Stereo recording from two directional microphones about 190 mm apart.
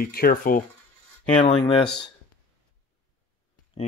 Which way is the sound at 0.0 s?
50° left (ahead or behind).